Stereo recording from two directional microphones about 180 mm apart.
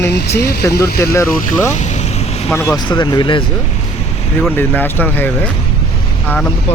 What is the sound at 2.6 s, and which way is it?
Speech, 25° left (ahead or behind).